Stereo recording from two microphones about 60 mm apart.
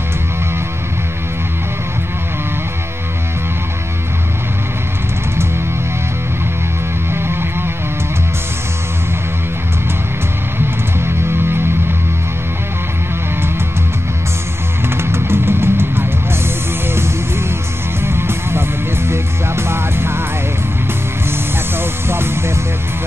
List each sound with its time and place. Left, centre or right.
7.1 s music: right
15.0 s music: right
21.3 s music: right